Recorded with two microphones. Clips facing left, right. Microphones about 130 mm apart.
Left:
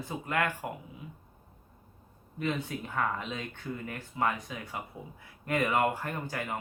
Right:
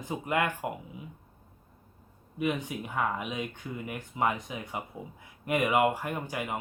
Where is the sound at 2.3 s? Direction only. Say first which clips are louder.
Right 2 dB; 15° right (ahead or behind).